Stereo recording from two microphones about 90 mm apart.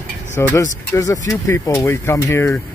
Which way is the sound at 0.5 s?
35° left (ahead or behind).